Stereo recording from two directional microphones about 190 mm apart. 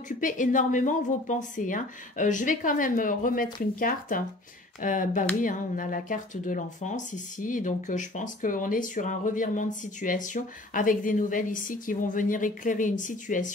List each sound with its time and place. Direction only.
0.2 s speech: 45° left (ahead or behind)
4.8 s speech: 45° left (ahead or behind)